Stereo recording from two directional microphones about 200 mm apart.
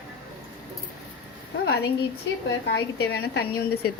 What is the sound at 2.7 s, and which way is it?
Speech, 55° left (ahead or behind).